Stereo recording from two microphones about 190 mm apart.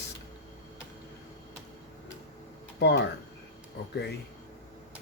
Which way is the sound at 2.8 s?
60° left (ahead or behind).